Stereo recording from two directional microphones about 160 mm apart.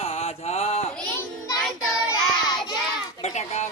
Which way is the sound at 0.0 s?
40° left (ahead or behind).